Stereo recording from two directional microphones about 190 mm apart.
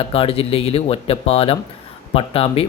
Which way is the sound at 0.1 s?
30° left (ahead or behind).